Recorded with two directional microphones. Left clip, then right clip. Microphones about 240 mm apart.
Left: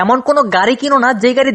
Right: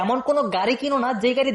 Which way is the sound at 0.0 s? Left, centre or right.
Left.